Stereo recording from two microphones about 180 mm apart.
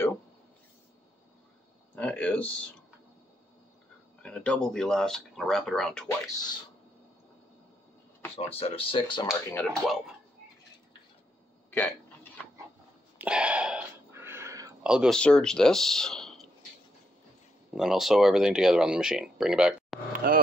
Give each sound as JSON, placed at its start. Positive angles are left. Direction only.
{"t": 2.0, "sound": "speech", "side_deg": 10}
{"t": 4.2, "sound": "speech", "side_deg": 5}
{"t": 8.5, "sound": "speech", "side_deg": 30}
{"t": 9.5, "sound": "speech", "side_deg": 10}
{"t": 11.7, "sound": "hiccup", "side_deg": 10}
{"t": 13.2, "sound": "a sound", "side_deg": -5}
{"t": 14.8, "sound": "speech", "side_deg": -5}
{"t": 17.7, "sound": "speech", "side_deg": 0}
{"t": 20.2, "sound": "cattle", "side_deg": -50}